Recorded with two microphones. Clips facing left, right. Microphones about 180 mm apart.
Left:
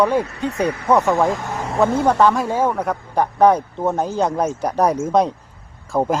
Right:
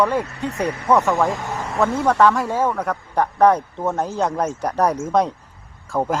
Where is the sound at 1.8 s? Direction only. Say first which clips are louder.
Left 2 dB; 30° left (ahead or behind).